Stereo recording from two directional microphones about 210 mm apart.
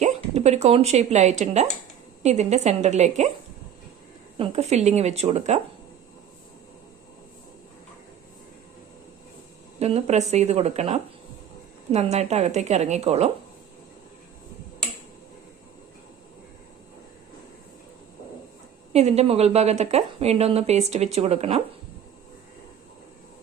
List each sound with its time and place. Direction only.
0.0 s a woman's voice: 30° right (ahead or behind)
4.4 s a woman's voice: 30° right (ahead or behind)
9.7 s a woman's voice: 30° right (ahead or behind)
18.9 s a woman's voice: 30° right (ahead or behind)